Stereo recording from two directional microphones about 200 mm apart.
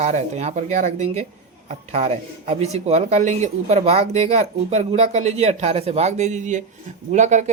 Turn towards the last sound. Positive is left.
turn(degrees=-35)  # may be behind; listen again after turning